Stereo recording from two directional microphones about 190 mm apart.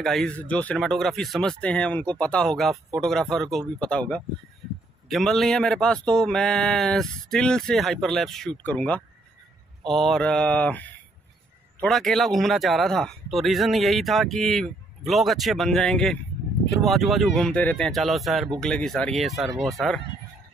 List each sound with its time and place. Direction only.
0.0 s speech: centre (ahead or behind)
5.0 s speech: centre (ahead or behind)